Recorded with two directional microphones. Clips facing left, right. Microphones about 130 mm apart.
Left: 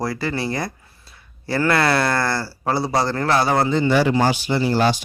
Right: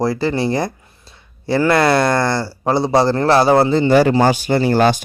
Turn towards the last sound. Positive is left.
turn(degrees=-55)  # may be behind; listen again after turning